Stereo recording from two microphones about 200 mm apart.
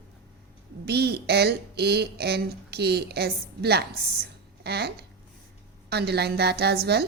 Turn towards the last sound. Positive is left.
turn(degrees=-55)  # may be behind; listen again after turning